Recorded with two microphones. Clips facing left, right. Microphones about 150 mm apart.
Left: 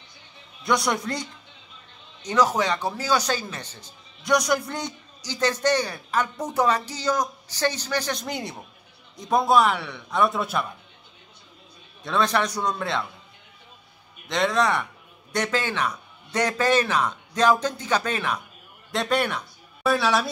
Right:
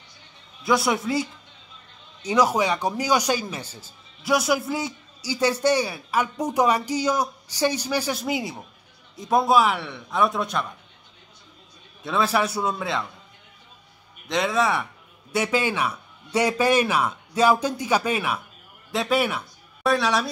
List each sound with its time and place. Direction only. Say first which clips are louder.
0.7 s a man's voice: right 2 dB; 5° right (ahead or behind)
12.0 s a man's voice: right 1 dB; 5° right (ahead or behind)
14.2 s a man's voice: even; centre (ahead or behind)